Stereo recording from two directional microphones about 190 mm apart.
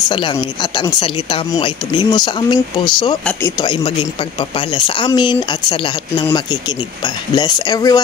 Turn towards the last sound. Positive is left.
turn(degrees=20)  # may be behind; listen again after turning